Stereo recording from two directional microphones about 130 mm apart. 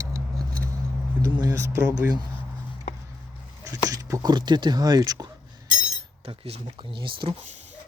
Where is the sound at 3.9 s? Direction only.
25° right (ahead or behind).